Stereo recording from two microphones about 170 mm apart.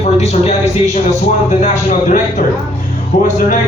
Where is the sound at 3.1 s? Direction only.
45° left (ahead or behind).